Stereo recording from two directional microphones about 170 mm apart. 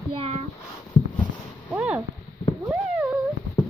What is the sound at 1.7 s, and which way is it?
Speech, 10° right (ahead or behind).